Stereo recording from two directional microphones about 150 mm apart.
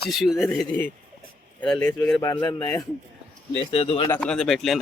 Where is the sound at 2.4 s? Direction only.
30° left (ahead or behind).